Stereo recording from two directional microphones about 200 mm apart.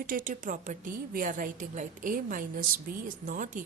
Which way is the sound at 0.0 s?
45° right (ahead or behind).